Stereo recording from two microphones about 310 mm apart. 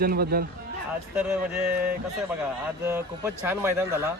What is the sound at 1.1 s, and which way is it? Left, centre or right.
Speech, centre.